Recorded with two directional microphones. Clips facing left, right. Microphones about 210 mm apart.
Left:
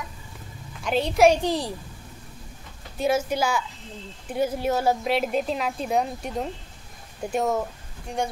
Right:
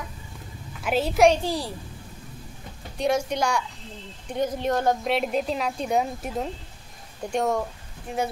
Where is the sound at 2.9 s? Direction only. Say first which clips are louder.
Left 1 dB; 5° left (ahead or behind).